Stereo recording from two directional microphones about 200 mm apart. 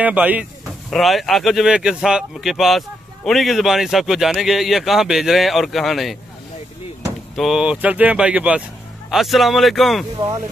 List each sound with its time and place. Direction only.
0.0 s speech: 10° right (ahead or behind)
7.3 s speech: centre (ahead or behind)
10.1 s speech: 15° right (ahead or behind)